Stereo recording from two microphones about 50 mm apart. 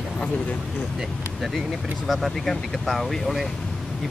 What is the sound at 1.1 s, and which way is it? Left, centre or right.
Vehicle, centre.